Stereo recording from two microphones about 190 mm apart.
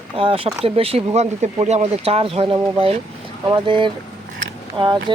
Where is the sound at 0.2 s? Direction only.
30° right (ahead or behind).